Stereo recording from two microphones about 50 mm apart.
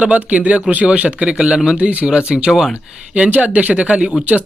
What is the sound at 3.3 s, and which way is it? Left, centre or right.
Speech, right.